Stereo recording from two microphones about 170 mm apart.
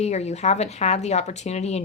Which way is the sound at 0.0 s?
40° left (ahead or behind).